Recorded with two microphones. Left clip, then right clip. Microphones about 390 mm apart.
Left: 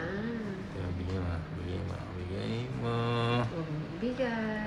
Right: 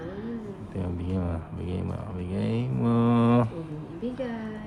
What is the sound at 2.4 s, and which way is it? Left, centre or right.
Mantra, centre.